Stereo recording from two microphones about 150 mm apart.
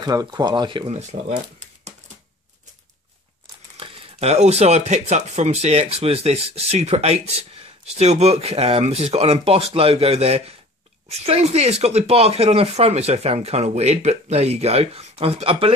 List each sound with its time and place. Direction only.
0.0 s speech: 25° right (ahead or behind)
0.8 s speech: 45° right (ahead or behind)
3.7 s speech: 40° right (ahead or behind)